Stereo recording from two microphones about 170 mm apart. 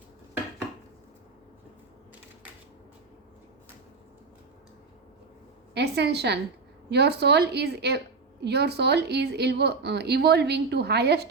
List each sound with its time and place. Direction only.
5.7 s a woman's voice: 80° right